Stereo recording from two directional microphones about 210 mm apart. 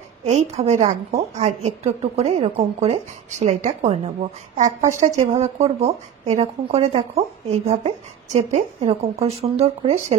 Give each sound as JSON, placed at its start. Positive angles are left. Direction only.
{"t": 0.2, "sound": "a woman's voice", "side_deg": -30}